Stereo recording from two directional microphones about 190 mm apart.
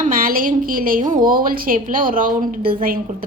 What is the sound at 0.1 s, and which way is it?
A woman's voice, 45° right (ahead or behind).